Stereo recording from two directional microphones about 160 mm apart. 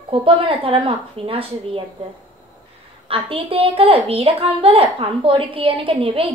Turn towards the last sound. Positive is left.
turn(degrees=-35)  # may be behind; listen again after turning